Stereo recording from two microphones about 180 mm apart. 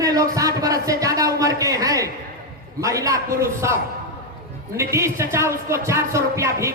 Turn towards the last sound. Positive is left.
turn(degrees=-15)  # may be behind; listen again after turning